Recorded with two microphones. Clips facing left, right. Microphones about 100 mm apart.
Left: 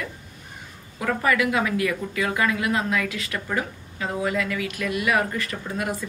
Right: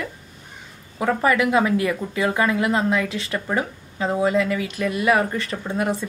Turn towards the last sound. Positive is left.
turn(degrees=-30)  # may be behind; listen again after turning